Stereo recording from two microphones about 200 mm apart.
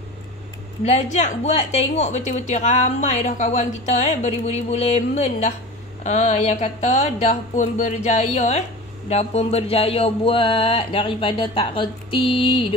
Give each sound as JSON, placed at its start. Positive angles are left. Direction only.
{"t": 0.8, "sound": "a woman's voice", "side_deg": 35}